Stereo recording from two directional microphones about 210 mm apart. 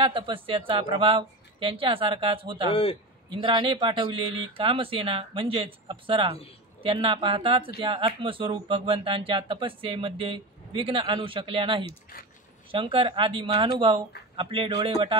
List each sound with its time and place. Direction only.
0.0 s speech: 25° right (ahead or behind)
2.7 s a man's voice: 25° left (ahead or behind)
3.3 s speech: 25° right (ahead or behind)